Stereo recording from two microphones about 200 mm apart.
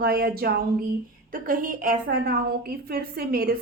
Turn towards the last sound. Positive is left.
turn(degrees=-50)  # may be behind; listen again after turning